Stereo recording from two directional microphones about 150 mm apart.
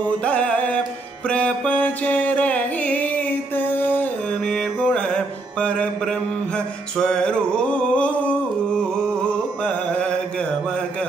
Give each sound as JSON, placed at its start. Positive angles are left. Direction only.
{"t": 0.2, "sound": "music", "side_deg": 10}